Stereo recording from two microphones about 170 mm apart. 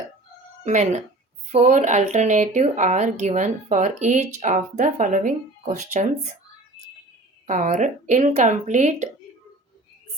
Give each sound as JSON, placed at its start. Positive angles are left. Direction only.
{"t": 0.6, "sound": "speech", "side_deg": -45}
{"t": 7.4, "sound": "speech", "side_deg": -50}